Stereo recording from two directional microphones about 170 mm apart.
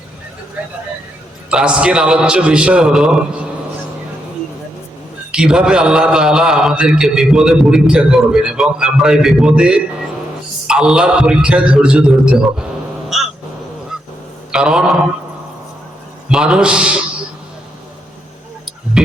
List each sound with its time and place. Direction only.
1.5 s a man's voice: 5° right (ahead or behind)
5.3 s a man's voice: 5° right (ahead or behind)
13.1 s cat: centre (ahead or behind)
14.5 s a man's voice: 5° right (ahead or behind)
16.3 s a man's voice: 5° right (ahead or behind)
19.0 s a man's voice: centre (ahead or behind)